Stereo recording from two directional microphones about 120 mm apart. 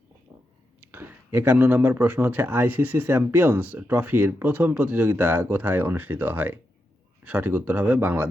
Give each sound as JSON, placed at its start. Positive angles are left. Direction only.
{"t": 0.9, "sound": "speech", "side_deg": -20}